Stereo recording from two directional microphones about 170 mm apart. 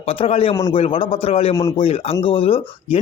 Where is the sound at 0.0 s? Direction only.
35° left (ahead or behind).